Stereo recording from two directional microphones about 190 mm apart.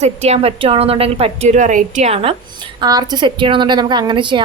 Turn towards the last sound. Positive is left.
turn(degrees=-25)  # may be behind; listen again after turning